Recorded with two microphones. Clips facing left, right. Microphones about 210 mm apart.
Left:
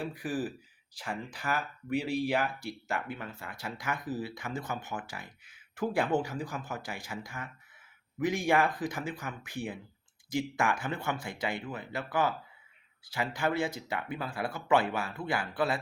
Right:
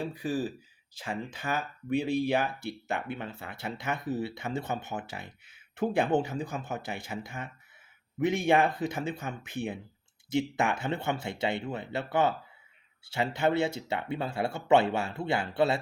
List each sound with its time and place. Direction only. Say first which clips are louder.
0.0 s speech: right 2 dB; 25° right (ahead or behind)